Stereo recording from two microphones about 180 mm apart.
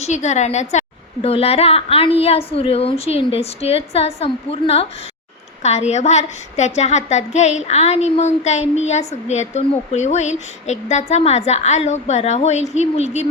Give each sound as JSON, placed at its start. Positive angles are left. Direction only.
{"t": 0.0, "sound": "a woman's voice", "side_deg": 40}